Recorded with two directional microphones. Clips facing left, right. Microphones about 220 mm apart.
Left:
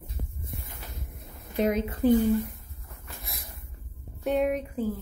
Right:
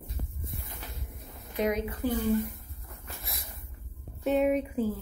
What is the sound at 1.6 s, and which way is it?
Speech, 25° left (ahead or behind).